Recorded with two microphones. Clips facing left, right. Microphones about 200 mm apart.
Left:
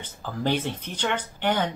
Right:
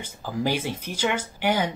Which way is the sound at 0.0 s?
10° right (ahead or behind).